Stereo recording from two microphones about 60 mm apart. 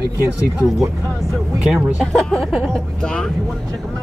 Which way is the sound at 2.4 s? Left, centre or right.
Centre.